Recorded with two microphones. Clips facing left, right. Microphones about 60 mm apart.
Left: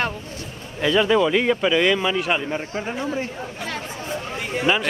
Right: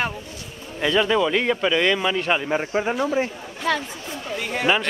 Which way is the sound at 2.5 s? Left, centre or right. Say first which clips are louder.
Right 4 dB; right.